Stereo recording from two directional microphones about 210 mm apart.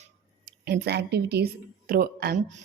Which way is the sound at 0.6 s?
50° right (ahead or behind).